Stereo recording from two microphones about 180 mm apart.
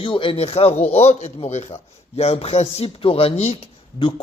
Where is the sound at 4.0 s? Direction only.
25° left (ahead or behind).